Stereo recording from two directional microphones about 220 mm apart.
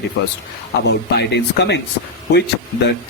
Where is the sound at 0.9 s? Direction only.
50° left (ahead or behind).